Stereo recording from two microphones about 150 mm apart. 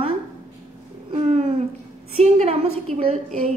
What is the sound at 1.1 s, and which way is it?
A woman's voice, 45° right (ahead or behind).